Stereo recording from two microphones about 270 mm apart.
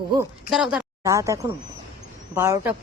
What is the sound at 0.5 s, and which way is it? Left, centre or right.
A woman's voice, centre.